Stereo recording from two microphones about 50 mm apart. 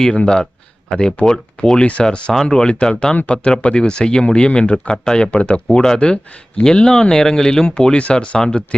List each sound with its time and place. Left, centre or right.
0.2 s speech: centre
5.6 s speech: centre